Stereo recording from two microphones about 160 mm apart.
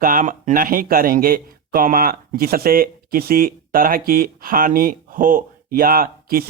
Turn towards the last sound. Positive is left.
turn(degrees=-65)  # may be behind; listen again after turning